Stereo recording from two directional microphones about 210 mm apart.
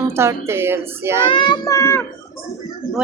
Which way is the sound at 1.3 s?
25° left (ahead or behind).